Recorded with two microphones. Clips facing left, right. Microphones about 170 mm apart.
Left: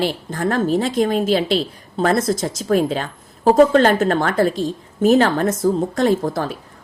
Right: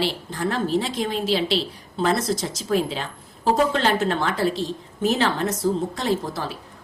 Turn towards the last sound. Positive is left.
turn(degrees=50)  # may be behind; listen again after turning